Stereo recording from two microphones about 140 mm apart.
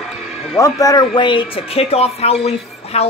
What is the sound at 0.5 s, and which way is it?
Speech, 25° left (ahead or behind).